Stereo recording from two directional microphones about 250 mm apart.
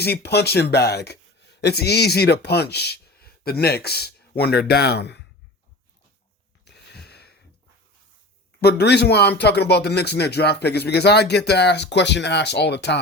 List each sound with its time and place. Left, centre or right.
0.0 s speech: left
6.7 s a sound: left
8.6 s speech: left